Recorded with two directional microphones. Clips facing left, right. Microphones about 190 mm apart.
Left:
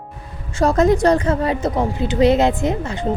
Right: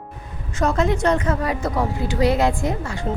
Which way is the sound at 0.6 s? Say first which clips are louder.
Left 5 dB; 40° left (ahead or behind).